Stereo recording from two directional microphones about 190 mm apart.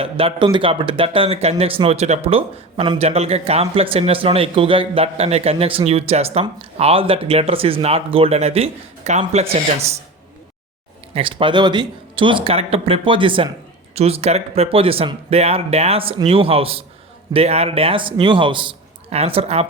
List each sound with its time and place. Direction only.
0.0 s speech: 30° right (ahead or behind)
11.1 s speech: 30° right (ahead or behind)